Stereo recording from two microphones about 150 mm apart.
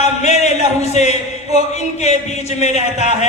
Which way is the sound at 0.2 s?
50° left (ahead or behind).